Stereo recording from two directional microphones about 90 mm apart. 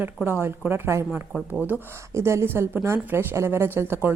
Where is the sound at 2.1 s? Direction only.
30° right (ahead or behind).